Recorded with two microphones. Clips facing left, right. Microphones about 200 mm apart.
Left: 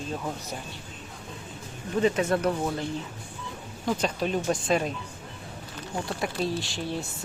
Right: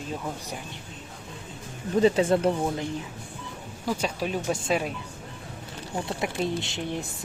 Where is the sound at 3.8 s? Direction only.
10° right (ahead or behind).